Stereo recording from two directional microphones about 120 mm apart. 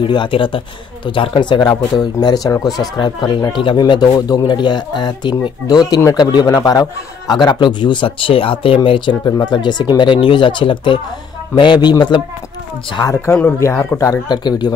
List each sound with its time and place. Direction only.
0.0 s speech: 45° left (ahead or behind)
13.1 s speech: 20° left (ahead or behind)